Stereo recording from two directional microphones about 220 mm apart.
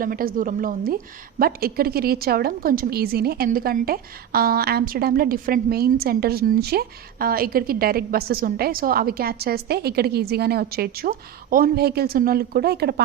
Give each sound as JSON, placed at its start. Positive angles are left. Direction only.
{"t": 0.0, "sound": "a woman's voice", "side_deg": -40}